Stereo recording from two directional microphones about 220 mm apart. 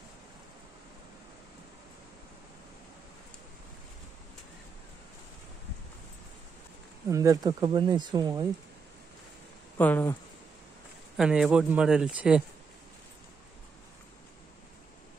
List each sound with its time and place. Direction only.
7.1 s speech: 15° right (ahead or behind)
9.8 s speech: 10° left (ahead or behind)
11.1 s speech: centre (ahead or behind)